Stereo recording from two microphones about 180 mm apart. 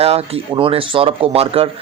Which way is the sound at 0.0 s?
35° right (ahead or behind).